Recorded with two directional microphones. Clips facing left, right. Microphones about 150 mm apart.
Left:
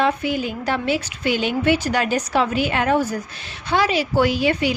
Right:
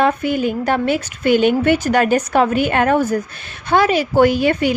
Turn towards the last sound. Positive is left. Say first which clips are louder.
# right 5 dB
turn(degrees=-50)  # may be behind; listen again after turning